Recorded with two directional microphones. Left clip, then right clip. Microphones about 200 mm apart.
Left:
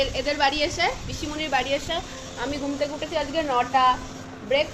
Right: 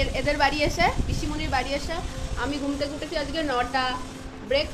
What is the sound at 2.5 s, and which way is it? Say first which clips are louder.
A woman's voice: left 2 dB; 20° right (ahead or behind).